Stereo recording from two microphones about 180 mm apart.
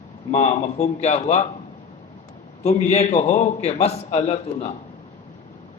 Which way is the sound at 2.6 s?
40° left (ahead or behind).